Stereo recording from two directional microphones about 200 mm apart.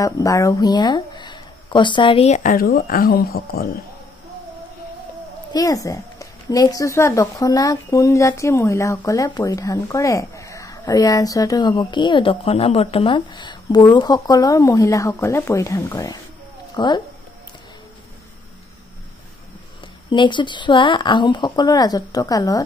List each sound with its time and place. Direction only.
0.0 s speech: 15° left (ahead or behind); by 3.8 s 50° left (ahead or behind)
5.5 s speech: 15° left (ahead or behind)
20.1 s speech: 25° left (ahead or behind)